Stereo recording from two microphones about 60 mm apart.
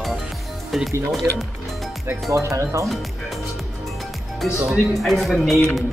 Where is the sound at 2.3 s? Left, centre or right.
Right.